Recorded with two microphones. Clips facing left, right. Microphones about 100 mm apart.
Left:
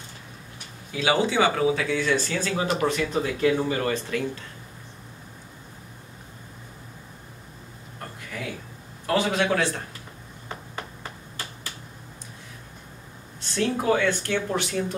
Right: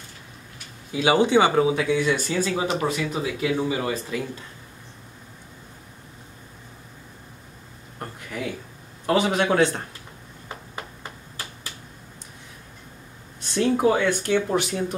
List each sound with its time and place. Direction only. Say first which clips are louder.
0.9 s speech: right 4 dB; 15° right (ahead or behind)
9.0 s speech: right 2 dB; 20° right (ahead or behind)
13.6 s speech: right 3 dB; 20° right (ahead or behind)